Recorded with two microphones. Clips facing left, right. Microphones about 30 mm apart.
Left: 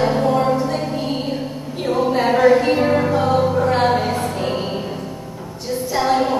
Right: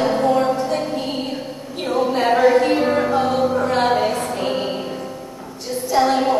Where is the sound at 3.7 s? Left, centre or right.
Centre.